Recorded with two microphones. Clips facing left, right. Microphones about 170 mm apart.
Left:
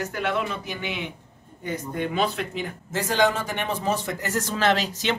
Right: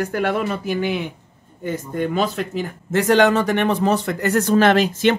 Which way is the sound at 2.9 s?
70° right (ahead or behind).